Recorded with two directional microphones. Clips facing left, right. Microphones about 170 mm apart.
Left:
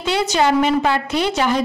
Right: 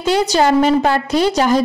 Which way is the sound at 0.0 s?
40° right (ahead or behind).